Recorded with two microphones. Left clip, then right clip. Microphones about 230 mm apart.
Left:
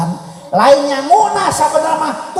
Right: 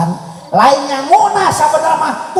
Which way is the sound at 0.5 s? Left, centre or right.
Left.